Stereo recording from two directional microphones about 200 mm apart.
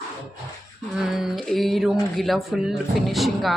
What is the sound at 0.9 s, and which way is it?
Speech, centre (ahead or behind).